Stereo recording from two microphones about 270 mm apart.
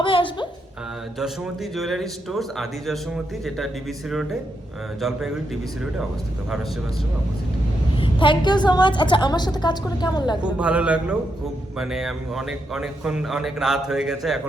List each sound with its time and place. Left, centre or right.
0.0 s music: centre
1.7 s speech: centre
4.1 s speech: centre
7.9 s a woman's voice: centre
10.4 s speech: centre